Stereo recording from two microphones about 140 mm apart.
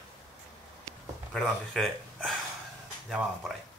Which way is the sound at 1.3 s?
Centre (ahead or behind).